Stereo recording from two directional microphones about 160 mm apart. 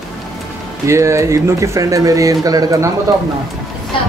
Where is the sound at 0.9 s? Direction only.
15° right (ahead or behind).